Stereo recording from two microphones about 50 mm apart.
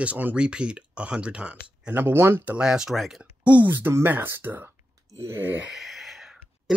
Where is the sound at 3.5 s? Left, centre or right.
Right.